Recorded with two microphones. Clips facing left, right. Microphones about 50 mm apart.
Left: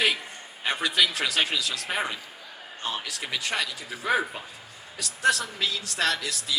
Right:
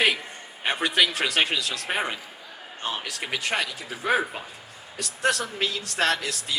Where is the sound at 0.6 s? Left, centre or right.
Right.